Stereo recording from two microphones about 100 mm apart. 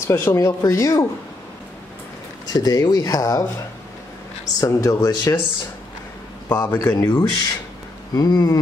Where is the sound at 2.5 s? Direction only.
40° left (ahead or behind).